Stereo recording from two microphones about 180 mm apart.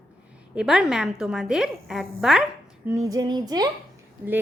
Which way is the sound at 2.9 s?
20° right (ahead or behind).